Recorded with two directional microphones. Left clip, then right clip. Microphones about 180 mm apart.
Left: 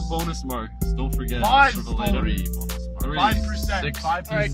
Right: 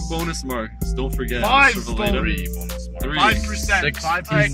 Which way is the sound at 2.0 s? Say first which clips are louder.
Right 5 dB; 15° left (ahead or behind).